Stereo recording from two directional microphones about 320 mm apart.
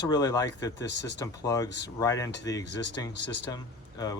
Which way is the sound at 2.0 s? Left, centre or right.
Centre.